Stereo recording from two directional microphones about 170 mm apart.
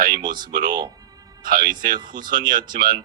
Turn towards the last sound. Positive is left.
turn(degrees=-55)  # may be behind; listen again after turning